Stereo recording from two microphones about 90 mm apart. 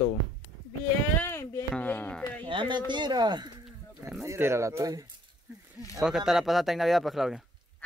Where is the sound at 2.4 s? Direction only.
65° right (ahead or behind).